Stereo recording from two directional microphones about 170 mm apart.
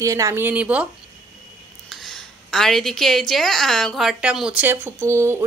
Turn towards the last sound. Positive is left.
turn(degrees=-15)  # may be behind; listen again after turning